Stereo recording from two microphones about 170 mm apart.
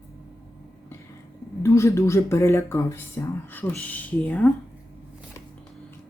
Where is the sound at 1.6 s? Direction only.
15° left (ahead or behind).